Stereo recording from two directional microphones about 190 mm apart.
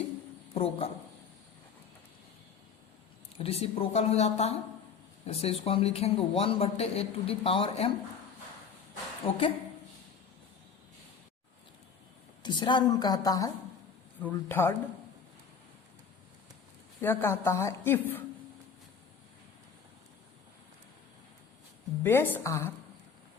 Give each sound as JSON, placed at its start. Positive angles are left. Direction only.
{"t": 0.5, "sound": "a man's voice", "side_deg": 30}
{"t": 3.3, "sound": "speech", "side_deg": 30}
{"t": 9.2, "sound": "speech", "side_deg": 30}
{"t": 12.4, "sound": "a woman's voice", "side_deg": 25}
{"t": 17.0, "sound": "a woman's voice", "side_deg": 10}
{"t": 22.0, "sound": "a woman's voice", "side_deg": 10}